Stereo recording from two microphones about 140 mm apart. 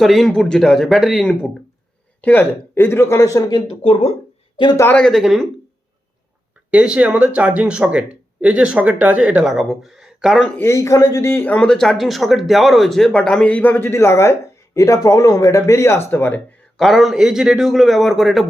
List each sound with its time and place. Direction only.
0.0 s a man's voice: centre (ahead or behind); by 3.6 s 25° left (ahead or behind)
3.7 s speech: 45° left (ahead or behind)
4.8 s a man's voice: 10° left (ahead or behind)
6.7 s speech: 10° right (ahead or behind)
10.6 s speech: 20° left (ahead or behind)
16.7 s a man's voice: centre (ahead or behind)